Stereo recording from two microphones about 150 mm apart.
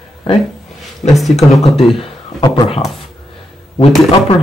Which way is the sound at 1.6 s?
40° left (ahead or behind).